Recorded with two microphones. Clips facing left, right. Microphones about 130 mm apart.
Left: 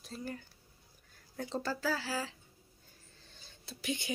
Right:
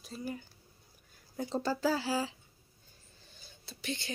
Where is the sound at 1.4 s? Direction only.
15° right (ahead or behind).